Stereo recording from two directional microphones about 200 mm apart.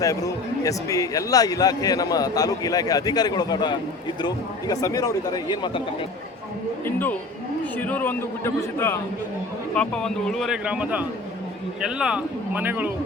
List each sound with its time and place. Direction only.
0.0 s a man's voice: 15° left (ahead or behind)
6.8 s a man's voice: 10° left (ahead or behind); by 12.9 s 10° right (ahead or behind)